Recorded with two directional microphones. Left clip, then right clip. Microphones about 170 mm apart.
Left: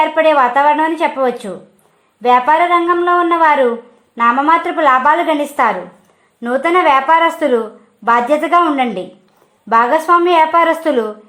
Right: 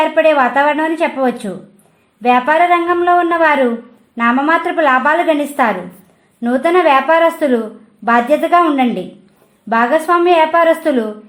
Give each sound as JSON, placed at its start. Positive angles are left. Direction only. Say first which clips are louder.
{"t": 0.0, "sound": "a woman's voice", "louder": "even", "side_deg": 25}